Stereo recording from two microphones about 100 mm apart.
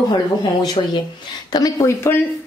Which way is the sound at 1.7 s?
30° left (ahead or behind).